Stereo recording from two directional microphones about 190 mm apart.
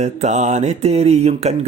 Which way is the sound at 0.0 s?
35° right (ahead or behind).